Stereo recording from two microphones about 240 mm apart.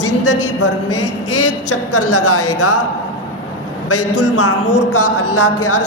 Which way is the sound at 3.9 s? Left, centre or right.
Left.